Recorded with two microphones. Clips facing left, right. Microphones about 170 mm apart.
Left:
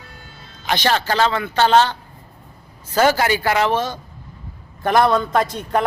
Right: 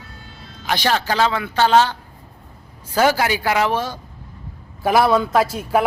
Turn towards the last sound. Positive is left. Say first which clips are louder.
# right 2 dB
turn(degrees=-5)  # may be behind; listen again after turning